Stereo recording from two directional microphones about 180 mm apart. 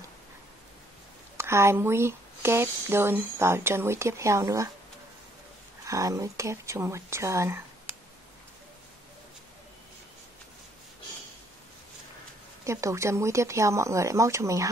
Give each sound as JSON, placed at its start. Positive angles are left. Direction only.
{"t": 1.3, "sound": "speech", "side_deg": -15}
{"t": 5.9, "sound": "speech", "side_deg": -20}
{"t": 12.6, "sound": "speech", "side_deg": -15}